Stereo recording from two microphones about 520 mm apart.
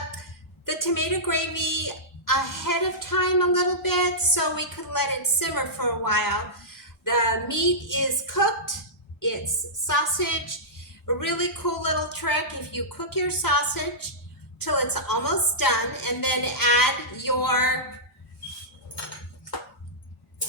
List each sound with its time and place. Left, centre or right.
0.2 s speech: left
9.8 s speech: left